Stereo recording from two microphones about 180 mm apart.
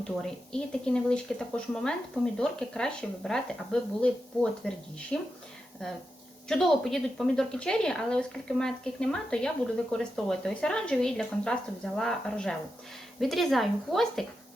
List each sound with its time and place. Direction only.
0.2 s speech: 5° left (ahead or behind)
6.5 s speech: 5° left (ahead or behind)